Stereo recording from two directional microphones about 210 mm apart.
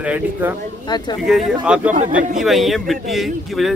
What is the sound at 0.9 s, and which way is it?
Speech, 20° left (ahead or behind).